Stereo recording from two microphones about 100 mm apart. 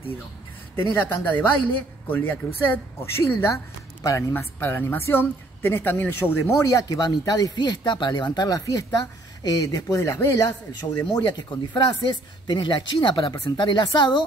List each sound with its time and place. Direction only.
0.9 s a woman's voice: 20° left (ahead or behind)
11.1 s speech: 45° left (ahead or behind)